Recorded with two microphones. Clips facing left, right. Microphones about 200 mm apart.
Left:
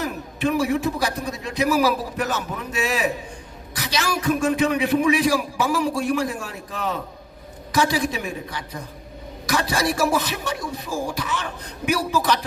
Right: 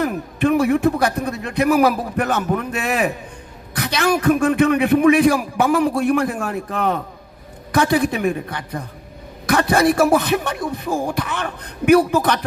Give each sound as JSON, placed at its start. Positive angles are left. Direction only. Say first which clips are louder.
{"t": 0.0, "sound": "a man's voice", "louder": "right 5 dB", "side_deg": -55}